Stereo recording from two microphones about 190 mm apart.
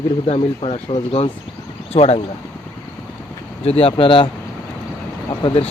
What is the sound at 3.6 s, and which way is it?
Speech, 30° left (ahead or behind).